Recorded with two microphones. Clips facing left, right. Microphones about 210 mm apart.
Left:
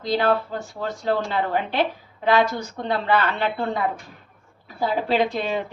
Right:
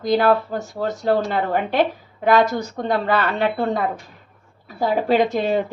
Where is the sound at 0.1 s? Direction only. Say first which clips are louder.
Right 4 dB; 45° right (ahead or behind).